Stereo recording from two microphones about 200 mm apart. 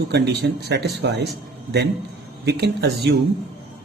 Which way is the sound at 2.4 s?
55° right (ahead or behind).